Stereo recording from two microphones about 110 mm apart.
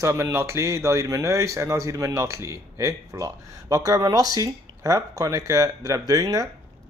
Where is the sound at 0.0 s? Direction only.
25° right (ahead or behind).